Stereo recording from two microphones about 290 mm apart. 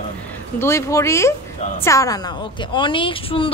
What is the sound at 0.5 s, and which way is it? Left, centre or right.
A woman's voice, centre.